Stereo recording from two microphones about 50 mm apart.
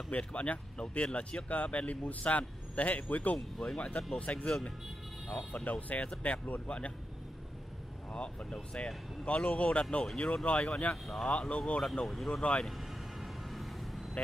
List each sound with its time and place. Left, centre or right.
0.2 s speech: left
3.3 s speech: centre
3.7 s speech: left
8.1 s speech: left
11.1 s speech: centre
11.8 s speech: centre
12.6 s vehicle: centre